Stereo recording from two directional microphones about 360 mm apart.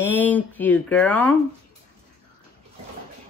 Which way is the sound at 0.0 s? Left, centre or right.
Centre.